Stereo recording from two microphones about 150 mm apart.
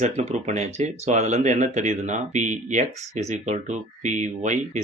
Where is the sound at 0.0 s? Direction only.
45° right (ahead or behind).